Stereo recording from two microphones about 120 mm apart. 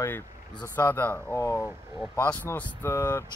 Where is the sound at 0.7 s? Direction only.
15° left (ahead or behind).